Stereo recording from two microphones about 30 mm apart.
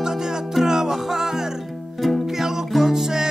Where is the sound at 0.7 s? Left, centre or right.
Centre.